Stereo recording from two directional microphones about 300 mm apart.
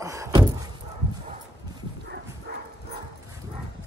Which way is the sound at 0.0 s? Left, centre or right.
Centre.